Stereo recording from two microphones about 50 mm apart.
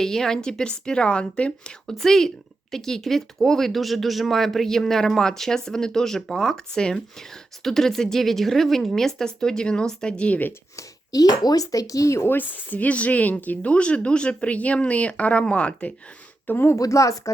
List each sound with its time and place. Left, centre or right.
0.0 s speech: centre
2.0 s speech: centre
11.9 s speech: left
12.2 s speech: left
16.6 s speech: left